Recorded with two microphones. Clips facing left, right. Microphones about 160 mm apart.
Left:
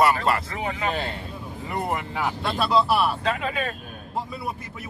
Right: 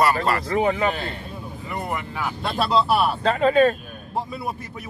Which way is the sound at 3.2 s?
35° right (ahead or behind).